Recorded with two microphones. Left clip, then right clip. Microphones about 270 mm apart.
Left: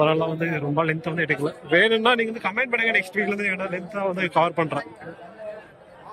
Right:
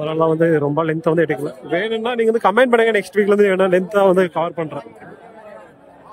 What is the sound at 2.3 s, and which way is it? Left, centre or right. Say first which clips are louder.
A man's voice: right 10 dB; centre.